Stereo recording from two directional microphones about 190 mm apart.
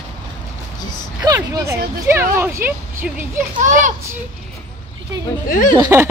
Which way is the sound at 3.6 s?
40° right (ahead or behind).